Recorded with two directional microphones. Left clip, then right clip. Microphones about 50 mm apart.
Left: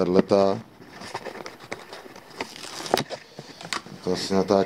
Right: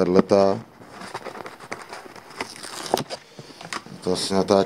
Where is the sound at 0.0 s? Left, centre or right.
Centre.